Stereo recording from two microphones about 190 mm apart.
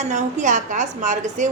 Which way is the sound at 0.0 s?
40° right (ahead or behind).